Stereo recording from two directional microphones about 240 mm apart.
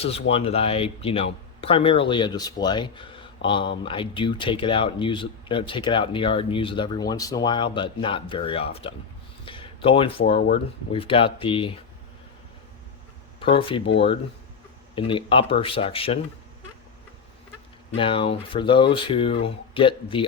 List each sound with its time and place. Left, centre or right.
0.0 s speech: left
9.4 s a sound: left
10.3 s speech: left
10.9 s speech: left
13.4 s speech: left
14.9 s speech: left
17.9 s speech: left